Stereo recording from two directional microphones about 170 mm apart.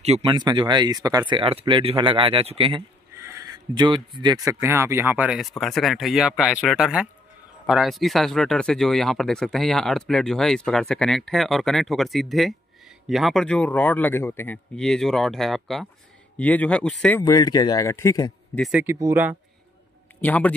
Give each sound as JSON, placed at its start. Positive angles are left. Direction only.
{"t": 0.0, "sound": "speech", "side_deg": -35}
{"t": 3.2, "sound": "speech", "side_deg": -15}
{"t": 17.2, "sound": "speech", "side_deg": 25}
{"t": 18.7, "sound": "speech", "side_deg": -10}
{"t": 20.2, "sound": "a man's voice", "side_deg": 10}